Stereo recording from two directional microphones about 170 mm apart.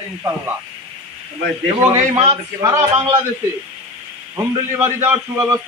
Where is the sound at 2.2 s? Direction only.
20° right (ahead or behind).